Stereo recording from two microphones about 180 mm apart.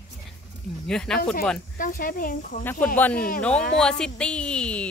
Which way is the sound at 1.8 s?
50° left (ahead or behind).